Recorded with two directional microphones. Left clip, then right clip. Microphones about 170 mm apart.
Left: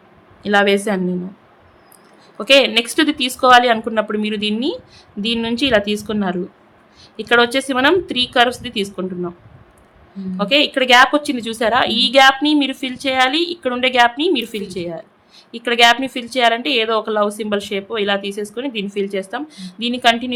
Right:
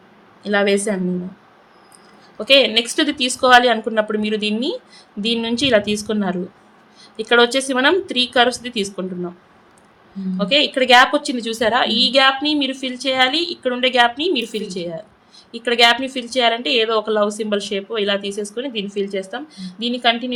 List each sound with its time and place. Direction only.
0.4 s a woman's voice: 15° left (ahead or behind)
2.4 s a woman's voice: 15° left (ahead or behind)
10.3 s a woman's voice: 10° left (ahead or behind)